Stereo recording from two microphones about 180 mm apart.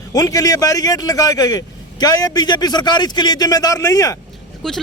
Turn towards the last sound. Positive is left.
turn(degrees=0)  # may be behind; listen again after turning